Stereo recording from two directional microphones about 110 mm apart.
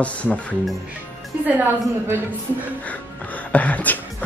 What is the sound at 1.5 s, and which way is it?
Speech, 15° right (ahead or behind).